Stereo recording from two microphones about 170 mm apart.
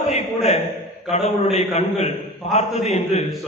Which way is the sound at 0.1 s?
40° left (ahead or behind).